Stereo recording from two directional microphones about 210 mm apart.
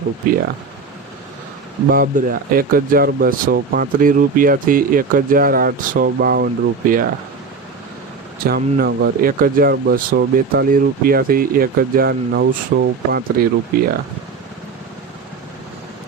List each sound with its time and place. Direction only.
1.9 s speech: 45° right (ahead or behind)
8.4 s speech: 45° right (ahead or behind)